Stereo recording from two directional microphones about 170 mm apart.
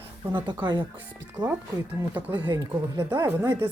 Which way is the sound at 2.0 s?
10° right (ahead or behind).